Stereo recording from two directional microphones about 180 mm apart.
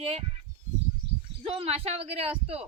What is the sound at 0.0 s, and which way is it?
Speech, 35° right (ahead or behind).